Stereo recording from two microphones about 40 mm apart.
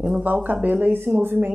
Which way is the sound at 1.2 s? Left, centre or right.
Right.